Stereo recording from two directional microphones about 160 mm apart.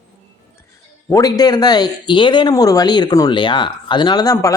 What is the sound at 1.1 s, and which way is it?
Speech, 25° left (ahead or behind).